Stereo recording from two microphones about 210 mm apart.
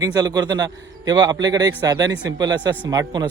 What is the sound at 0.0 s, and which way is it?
Speech, 20° right (ahead or behind).